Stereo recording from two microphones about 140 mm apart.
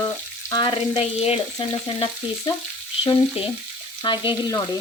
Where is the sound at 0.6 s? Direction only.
35° left (ahead or behind).